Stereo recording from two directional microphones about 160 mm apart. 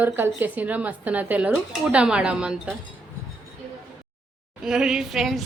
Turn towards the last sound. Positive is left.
turn(degrees=0)  # may be behind; listen again after turning